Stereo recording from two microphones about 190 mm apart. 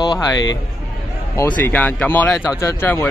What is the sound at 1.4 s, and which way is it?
Speech, 10° left (ahead or behind).